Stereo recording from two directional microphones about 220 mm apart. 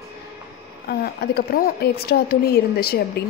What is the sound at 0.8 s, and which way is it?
Speech, 45° left (ahead or behind).